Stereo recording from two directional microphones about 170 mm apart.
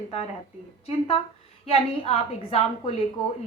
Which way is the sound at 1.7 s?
35° left (ahead or behind).